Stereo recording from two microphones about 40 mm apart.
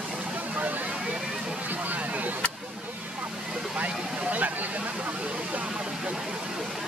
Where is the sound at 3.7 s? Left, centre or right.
Right.